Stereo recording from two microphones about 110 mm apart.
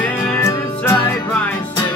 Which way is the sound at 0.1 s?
20° left (ahead or behind).